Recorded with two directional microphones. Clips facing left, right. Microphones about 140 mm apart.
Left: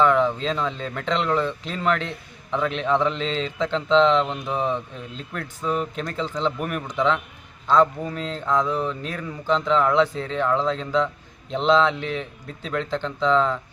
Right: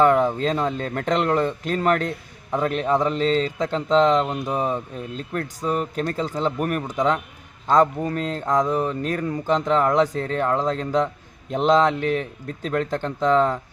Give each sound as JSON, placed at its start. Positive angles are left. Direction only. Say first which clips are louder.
{"t": 0.0, "sound": "a man's voice", "louder": "right 2 dB", "side_deg": -45}
{"t": 4.3, "sound": "a sound", "louder": "right 1 dB", "side_deg": -10}
{"t": 5.1, "sound": "a man's voice", "louder": "right 6 dB", "side_deg": -40}